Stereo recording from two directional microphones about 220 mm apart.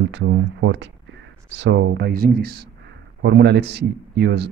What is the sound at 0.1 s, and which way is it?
Speech, 55° right (ahead or behind).